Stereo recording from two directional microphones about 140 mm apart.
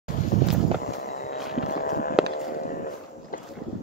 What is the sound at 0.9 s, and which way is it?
Walk, 90° left.